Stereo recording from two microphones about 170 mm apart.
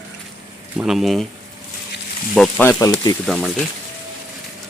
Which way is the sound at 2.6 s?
15° left (ahead or behind).